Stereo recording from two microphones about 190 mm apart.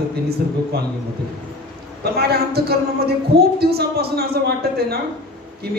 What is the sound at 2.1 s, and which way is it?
A man's voice, 55° right (ahead or behind).